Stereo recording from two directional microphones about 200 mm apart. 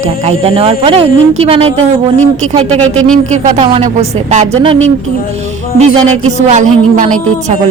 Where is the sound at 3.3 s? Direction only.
30° right (ahead or behind).